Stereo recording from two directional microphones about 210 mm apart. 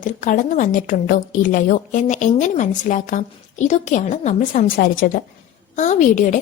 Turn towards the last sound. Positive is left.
turn(degrees=35)  # may be behind; listen again after turning